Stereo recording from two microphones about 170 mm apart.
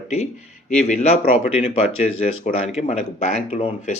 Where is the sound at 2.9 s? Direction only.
40° left (ahead or behind).